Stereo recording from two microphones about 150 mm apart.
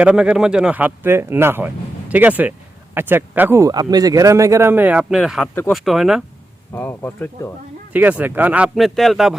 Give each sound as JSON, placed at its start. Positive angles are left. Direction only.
{"t": 0.0, "sound": "speech", "side_deg": -5}
{"t": 3.7, "sound": "speech", "side_deg": -25}
{"t": 6.7, "sound": "speech", "side_deg": 15}
{"t": 7.9, "sound": "speech", "side_deg": -10}